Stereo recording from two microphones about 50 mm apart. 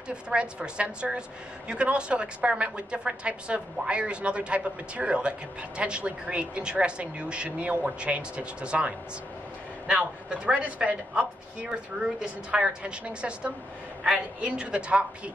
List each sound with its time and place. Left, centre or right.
0.1 s a woman's voice: right